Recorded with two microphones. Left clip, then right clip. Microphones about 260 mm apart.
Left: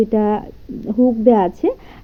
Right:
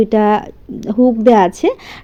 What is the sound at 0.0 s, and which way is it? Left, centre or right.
A woman's voice, right.